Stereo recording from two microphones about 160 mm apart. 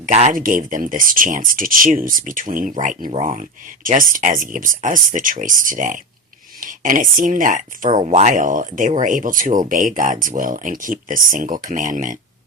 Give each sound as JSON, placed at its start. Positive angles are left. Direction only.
{"t": 0.0, "sound": "speech", "side_deg": -50}